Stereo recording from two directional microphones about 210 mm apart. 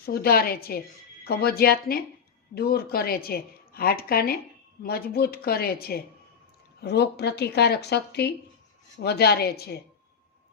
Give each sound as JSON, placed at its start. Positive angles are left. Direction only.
{"t": 0.0, "sound": "speech", "side_deg": 45}